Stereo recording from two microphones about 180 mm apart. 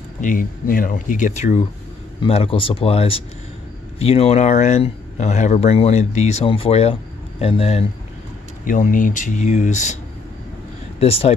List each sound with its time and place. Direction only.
0.2 s speech: 50° left (ahead or behind); by 7.8 s 35° left (ahead or behind)
8.6 s speech: 45° left (ahead or behind)
11.0 s speech: 35° left (ahead or behind)